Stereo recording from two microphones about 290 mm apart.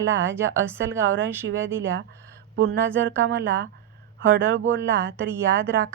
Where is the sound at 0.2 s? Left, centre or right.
Centre.